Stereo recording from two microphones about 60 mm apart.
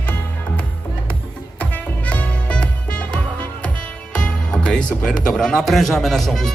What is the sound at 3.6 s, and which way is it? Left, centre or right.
A man's voice, centre.